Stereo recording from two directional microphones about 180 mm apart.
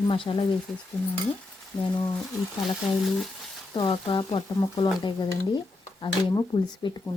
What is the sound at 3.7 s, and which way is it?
Speech, 25° left (ahead or behind).